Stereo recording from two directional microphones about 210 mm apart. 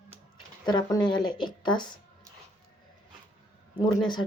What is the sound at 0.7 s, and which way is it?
Speech, 20° left (ahead or behind).